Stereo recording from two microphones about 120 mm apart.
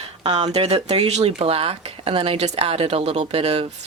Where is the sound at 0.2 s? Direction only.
60° right (ahead or behind).